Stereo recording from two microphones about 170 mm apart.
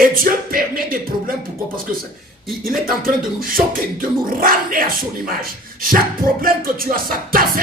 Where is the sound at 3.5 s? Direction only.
55° right (ahead or behind).